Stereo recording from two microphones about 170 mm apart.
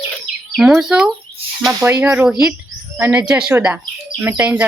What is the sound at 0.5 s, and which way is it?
Speech, centre (ahead or behind).